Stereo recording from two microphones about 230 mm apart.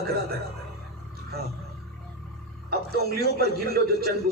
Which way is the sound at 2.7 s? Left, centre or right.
Right.